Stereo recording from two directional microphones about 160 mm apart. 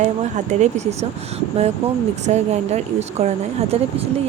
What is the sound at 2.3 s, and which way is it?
Speech, 45° right (ahead or behind).